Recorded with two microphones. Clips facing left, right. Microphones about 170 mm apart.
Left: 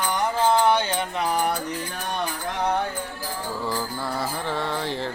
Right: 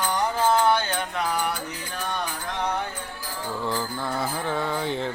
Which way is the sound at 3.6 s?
5° left (ahead or behind).